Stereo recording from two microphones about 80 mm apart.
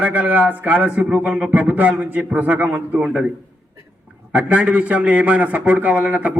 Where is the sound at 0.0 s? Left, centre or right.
Centre.